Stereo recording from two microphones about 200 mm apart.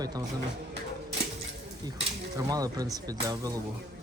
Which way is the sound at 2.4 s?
20° right (ahead or behind).